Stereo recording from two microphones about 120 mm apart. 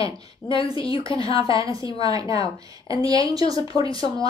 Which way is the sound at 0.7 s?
35° right (ahead or behind).